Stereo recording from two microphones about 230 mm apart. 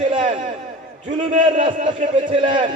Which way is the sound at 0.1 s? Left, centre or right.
Right.